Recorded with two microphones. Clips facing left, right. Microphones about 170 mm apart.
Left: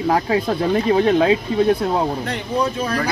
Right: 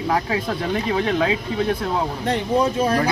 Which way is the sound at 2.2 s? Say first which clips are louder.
Right 2 dB; 30° right (ahead or behind).